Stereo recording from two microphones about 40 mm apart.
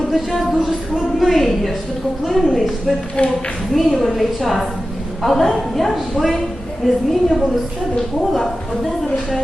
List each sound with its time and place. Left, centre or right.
0.1 s a woman's voice: centre
3.2 s speech: left
3.7 s a woman's voice: centre